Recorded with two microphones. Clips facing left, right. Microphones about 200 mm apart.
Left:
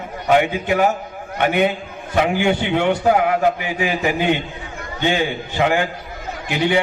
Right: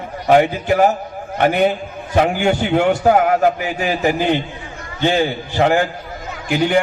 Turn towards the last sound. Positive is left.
turn(degrees=-45)  # may be behind; listen again after turning